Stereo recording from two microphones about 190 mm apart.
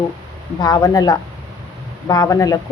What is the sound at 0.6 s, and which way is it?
A woman's voice, 20° left (ahead or behind).